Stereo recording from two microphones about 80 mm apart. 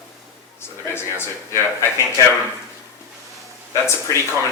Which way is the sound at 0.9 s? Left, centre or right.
Left.